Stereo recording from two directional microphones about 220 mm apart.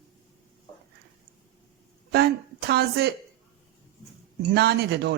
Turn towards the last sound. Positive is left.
turn(degrees=-50)  # may be behind; listen again after turning